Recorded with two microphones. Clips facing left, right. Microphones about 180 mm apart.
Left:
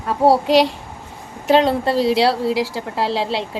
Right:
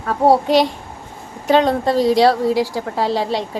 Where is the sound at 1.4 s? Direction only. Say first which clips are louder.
Even; centre (ahead or behind).